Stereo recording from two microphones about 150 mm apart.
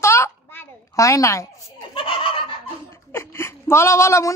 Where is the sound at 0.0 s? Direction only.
15° left (ahead or behind).